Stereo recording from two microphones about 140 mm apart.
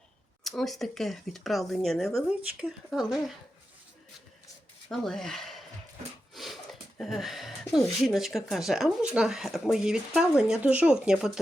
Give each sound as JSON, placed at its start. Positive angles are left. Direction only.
{"t": 0.4, "sound": "speech", "side_deg": 0}
{"t": 4.9, "sound": "speech", "side_deg": 5}
{"t": 6.3, "sound": "a sound", "side_deg": 0}
{"t": 8.0, "sound": "speech", "side_deg": 0}